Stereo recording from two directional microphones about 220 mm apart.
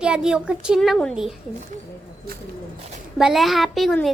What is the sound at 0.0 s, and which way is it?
A child's voice, 5° right (ahead or behind).